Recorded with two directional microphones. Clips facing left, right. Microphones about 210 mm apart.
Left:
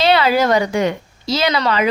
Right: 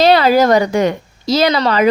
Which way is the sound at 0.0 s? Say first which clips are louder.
Right 4 dB; 40° right (ahead or behind).